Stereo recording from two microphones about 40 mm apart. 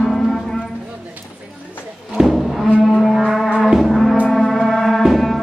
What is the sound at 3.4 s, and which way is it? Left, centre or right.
Music, centre.